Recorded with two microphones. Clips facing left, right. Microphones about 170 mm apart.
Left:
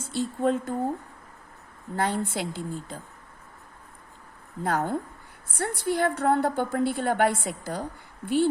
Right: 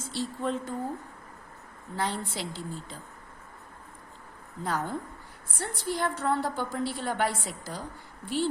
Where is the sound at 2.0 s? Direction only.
55° left (ahead or behind).